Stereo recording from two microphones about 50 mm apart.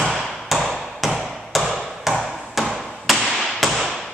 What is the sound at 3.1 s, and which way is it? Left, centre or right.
Tap, centre.